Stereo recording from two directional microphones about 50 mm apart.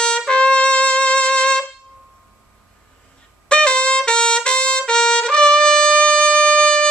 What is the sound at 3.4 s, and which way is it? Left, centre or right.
Trumpet, centre.